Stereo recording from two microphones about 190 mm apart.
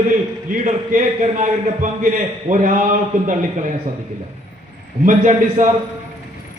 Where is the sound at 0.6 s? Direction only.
40° right (ahead or behind).